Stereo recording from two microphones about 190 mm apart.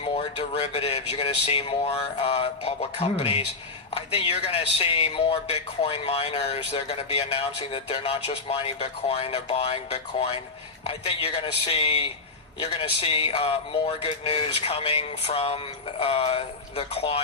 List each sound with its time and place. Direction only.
0.0 s speech: 30° left (ahead or behind)